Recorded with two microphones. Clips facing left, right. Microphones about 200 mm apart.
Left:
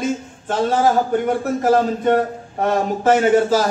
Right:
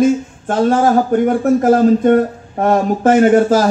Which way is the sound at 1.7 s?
50° right (ahead or behind).